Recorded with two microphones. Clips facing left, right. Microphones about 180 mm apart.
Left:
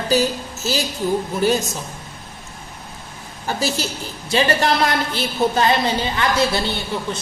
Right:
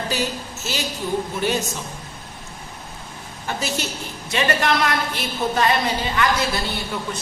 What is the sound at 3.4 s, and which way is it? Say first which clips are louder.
A woman's voice: left 3 dB; 35° left (ahead or behind).